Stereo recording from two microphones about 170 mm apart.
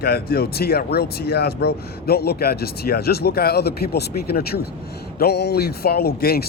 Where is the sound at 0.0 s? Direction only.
65° left (ahead or behind).